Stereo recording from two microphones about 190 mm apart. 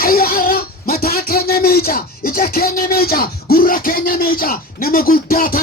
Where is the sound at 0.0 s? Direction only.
50° left (ahead or behind).